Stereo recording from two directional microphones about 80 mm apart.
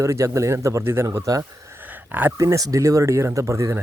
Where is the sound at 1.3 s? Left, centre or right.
Right.